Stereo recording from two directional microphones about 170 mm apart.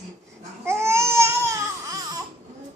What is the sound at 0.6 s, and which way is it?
Babbling, 15° right (ahead or behind).